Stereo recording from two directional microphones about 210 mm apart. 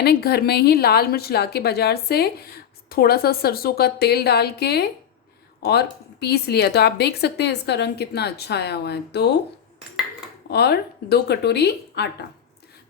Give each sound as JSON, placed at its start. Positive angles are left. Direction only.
{"t": 0.0, "sound": "speech", "side_deg": 50}
{"t": 10.5, "sound": "speech", "side_deg": 50}